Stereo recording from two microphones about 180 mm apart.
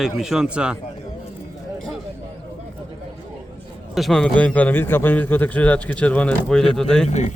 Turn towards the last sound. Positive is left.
turn(degrees=40)  # may be behind; listen again after turning